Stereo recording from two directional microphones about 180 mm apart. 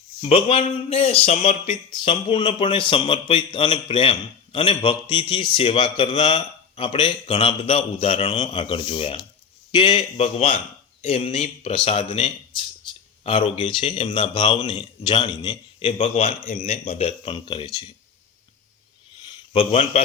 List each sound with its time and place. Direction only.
0.2 s speech: 30° left (ahead or behind)
12.5 s speech: 30° left (ahead or behind)
17.1 s speech: 30° left (ahead or behind)
19.5 s speech: 30° left (ahead or behind)